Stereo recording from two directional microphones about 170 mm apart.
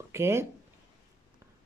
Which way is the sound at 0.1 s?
15° right (ahead or behind).